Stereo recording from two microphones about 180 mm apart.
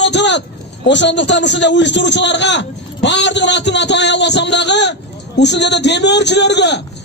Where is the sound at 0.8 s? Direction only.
75° left (ahead or behind).